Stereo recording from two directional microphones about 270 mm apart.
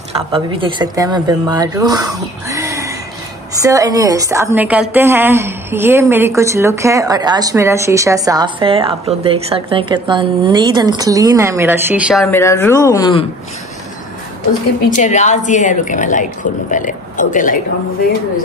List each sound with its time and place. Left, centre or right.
0.3 s a woman's voice: centre
12.3 s speech: centre
15.0 s a woman's voice: left